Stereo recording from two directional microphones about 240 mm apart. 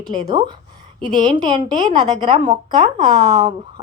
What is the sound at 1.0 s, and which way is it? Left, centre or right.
A woman's voice, centre.